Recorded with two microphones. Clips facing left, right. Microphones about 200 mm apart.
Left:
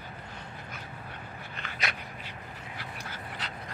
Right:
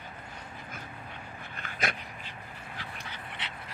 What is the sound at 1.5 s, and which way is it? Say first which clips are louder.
Dog: right 3 dB; 50° right (ahead or behind).